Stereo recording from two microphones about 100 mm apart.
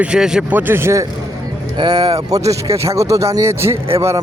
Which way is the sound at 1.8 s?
45° right (ahead or behind).